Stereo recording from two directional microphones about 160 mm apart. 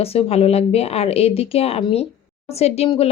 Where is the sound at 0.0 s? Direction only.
40° left (ahead or behind).